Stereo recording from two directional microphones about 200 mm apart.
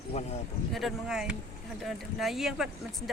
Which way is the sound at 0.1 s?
35° left (ahead or behind).